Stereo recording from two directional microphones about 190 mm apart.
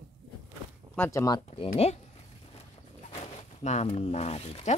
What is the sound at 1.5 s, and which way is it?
Speech, 30° left (ahead or behind).